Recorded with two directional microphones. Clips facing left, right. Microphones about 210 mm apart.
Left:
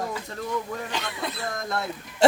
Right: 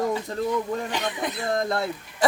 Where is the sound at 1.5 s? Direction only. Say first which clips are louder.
Right 7 dB; 30° right (ahead or behind).